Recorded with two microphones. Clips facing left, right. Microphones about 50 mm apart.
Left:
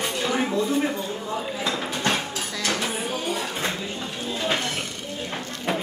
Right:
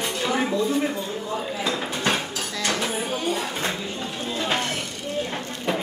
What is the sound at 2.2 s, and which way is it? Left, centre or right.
Dishes, centre.